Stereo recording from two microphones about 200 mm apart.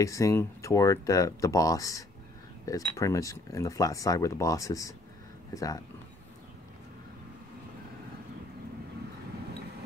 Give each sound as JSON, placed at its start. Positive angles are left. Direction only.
{"t": 0.0, "sound": "speech", "side_deg": 15}